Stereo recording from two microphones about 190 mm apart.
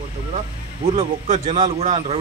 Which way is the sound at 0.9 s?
35° right (ahead or behind).